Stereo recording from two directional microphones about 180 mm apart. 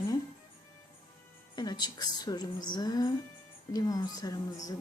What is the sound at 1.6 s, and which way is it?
Speech, 25° left (ahead or behind).